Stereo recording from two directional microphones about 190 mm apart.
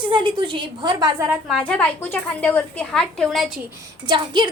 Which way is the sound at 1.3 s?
Centre (ahead or behind).